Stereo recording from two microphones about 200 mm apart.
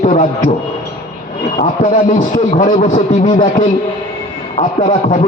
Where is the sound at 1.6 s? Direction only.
40° left (ahead or behind).